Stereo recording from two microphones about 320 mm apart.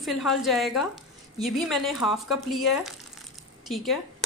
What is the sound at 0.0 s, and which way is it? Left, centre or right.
A woman's voice, centre.